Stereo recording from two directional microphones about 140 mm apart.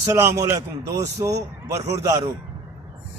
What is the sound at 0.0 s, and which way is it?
A man's voice, 20° right (ahead or behind).